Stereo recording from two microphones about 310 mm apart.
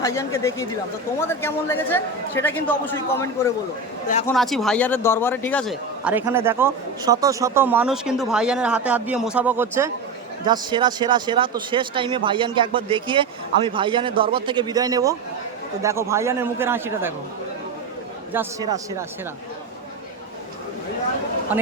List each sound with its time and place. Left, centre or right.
0.0 s a man's voice: centre
18.3 s speech: centre
21.5 s speech: centre